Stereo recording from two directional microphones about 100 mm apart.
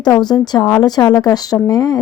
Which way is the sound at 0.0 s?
40° left (ahead or behind).